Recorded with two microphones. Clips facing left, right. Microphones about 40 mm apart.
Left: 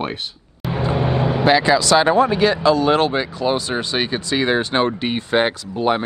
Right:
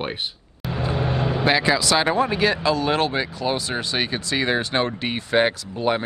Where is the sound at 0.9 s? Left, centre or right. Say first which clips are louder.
Left 4 dB; left.